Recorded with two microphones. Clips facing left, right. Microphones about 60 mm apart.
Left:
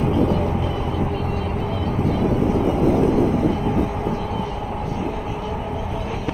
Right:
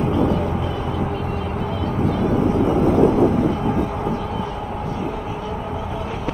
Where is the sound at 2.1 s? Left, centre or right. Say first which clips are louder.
Right 1 dB; right.